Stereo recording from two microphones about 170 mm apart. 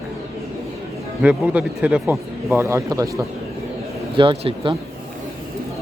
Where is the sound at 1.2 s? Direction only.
5° right (ahead or behind); by 4.7 s 30° right (ahead or behind).